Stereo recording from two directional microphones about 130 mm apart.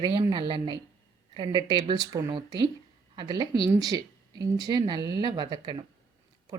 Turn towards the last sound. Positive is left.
turn(degrees=-35)  # may be behind; listen again after turning